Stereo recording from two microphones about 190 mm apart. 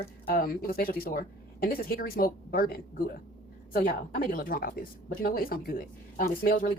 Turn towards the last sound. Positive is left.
turn(degrees=50)  # may be behind; listen again after turning